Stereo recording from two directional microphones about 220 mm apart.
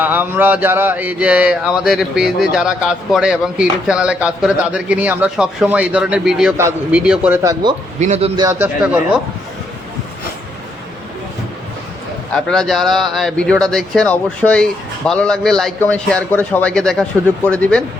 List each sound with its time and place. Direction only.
0.0 s speech: 10° right (ahead or behind)
7.6 s a man's voice: 20° right (ahead or behind)
8.4 s a man's voice: 10° right (ahead or behind)
12.3 s speech: 5° left (ahead or behind)